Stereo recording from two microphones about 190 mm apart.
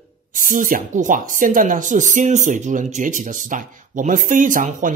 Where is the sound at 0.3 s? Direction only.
45° right (ahead or behind).